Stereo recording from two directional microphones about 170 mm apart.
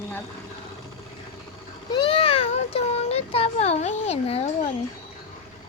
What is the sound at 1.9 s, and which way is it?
Speech, 30° left (ahead or behind).